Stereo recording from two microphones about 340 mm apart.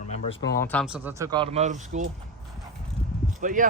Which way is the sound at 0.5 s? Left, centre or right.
Centre.